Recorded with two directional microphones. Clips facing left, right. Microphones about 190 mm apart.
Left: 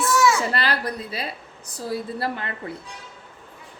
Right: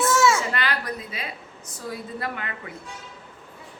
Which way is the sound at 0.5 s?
35° left (ahead or behind).